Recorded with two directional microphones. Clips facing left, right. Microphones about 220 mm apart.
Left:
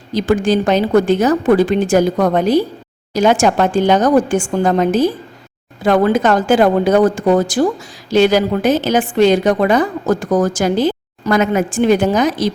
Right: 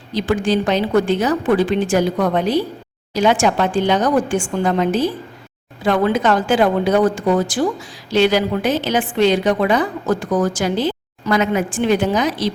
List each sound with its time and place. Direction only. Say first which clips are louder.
0.1 s a woman's voice: left 4 dB; 45° left (ahead or behind)